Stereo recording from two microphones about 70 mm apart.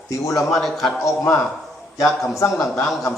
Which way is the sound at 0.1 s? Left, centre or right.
Left.